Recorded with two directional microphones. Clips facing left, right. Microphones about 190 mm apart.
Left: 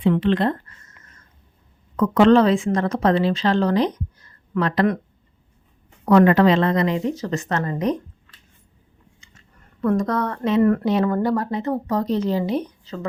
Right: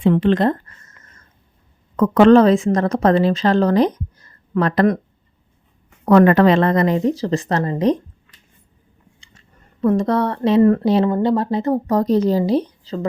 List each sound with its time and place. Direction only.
0.0 s a woman's voice: 45° right (ahead or behind)
2.0 s a woman's voice: 55° right (ahead or behind)
6.1 s speech: 50° right (ahead or behind); by 7.9 s 30° right (ahead or behind)
9.8 s speech: 25° right (ahead or behind)